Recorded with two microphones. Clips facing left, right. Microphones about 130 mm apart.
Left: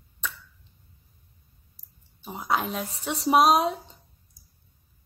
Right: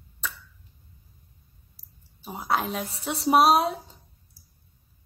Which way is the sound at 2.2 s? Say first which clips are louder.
Even; 5° right (ahead or behind).